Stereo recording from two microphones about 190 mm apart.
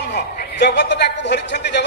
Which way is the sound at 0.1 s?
60° left (ahead or behind).